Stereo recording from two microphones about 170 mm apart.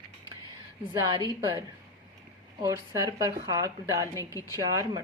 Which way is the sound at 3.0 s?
20° right (ahead or behind).